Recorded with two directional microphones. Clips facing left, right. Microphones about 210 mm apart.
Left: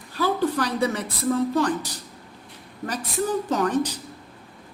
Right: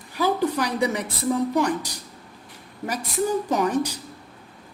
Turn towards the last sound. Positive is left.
turn(degrees=-10)  # may be behind; listen again after turning